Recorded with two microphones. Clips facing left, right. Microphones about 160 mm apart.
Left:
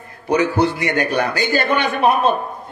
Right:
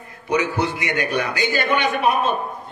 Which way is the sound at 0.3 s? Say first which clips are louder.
Left 5 dB; 35° left (ahead or behind).